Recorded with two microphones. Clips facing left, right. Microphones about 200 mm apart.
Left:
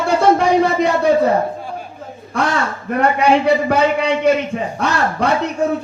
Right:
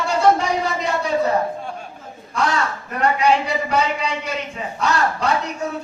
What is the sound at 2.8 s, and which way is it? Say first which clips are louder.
A man's voice: left 4 dB; 55° left (ahead or behind).